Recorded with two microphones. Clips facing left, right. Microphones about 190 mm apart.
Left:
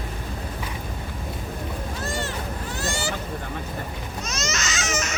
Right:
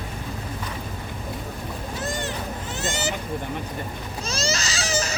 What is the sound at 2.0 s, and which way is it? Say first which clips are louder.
Vehicle: even; 20° right (ahead or behind).